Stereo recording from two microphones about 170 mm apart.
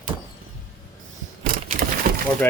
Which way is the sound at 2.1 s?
55° right (ahead or behind).